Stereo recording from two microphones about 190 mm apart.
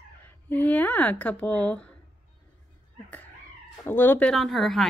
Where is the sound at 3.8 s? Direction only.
10° left (ahead or behind).